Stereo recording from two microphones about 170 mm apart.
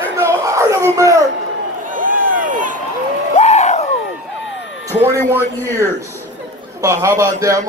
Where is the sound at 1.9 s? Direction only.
50° right (ahead or behind).